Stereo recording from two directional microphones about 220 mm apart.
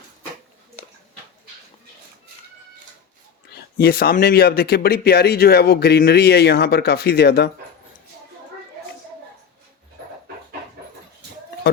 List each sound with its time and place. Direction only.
3.5 s speech: 45° left (ahead or behind)